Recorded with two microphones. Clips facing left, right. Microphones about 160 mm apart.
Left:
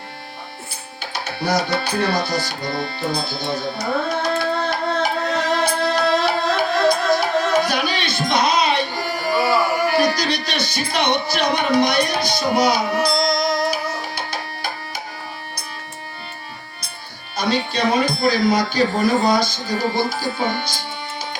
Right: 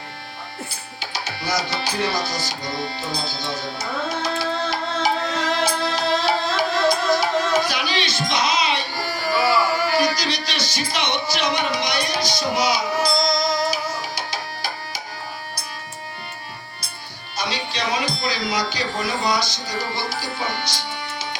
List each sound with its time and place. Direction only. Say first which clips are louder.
1.4 s tabla: left 6 dB; 60° left (ahead or behind)
3.0 s music: left 4 dB; 60° left (ahead or behind)
9.5 s speech: left 2 dB; 55° left (ahead or behind)
17.3 s speech: left 6 dB; 55° left (ahead or behind)